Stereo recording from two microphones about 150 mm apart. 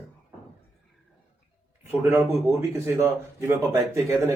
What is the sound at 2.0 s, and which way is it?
Speech, 15° right (ahead or behind).